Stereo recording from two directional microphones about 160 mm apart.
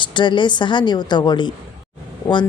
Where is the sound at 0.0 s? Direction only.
30° left (ahead or behind).